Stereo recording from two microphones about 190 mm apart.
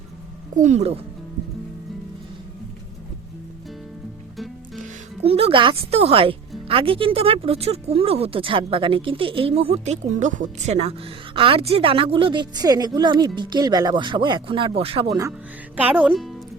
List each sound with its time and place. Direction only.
0.5 s speech: 40° right (ahead or behind)
5.2 s speech: 30° right (ahead or behind)
15.7 s music: 10° right (ahead or behind)